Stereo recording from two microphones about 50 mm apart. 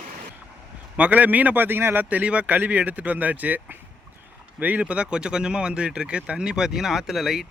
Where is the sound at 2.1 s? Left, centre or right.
Right.